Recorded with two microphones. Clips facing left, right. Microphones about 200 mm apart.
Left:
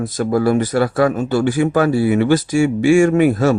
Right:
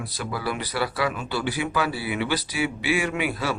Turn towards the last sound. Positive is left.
turn(degrees=45)  # may be behind; listen again after turning